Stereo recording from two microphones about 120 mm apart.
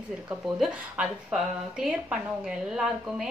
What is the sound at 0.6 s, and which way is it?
Speech, 5° right (ahead or behind).